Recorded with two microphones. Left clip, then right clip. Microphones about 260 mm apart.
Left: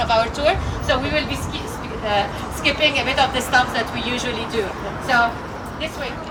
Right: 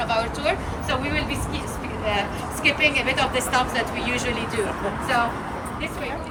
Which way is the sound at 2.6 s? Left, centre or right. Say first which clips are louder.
Left 2 dB; centre.